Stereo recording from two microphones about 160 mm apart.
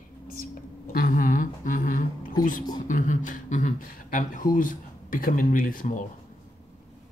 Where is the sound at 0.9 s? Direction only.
60° left (ahead or behind).